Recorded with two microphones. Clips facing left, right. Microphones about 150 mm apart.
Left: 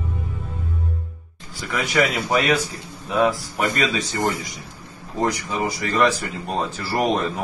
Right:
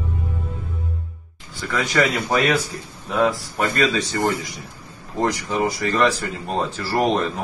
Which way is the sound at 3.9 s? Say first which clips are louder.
Right 2 dB; 15° left (ahead or behind).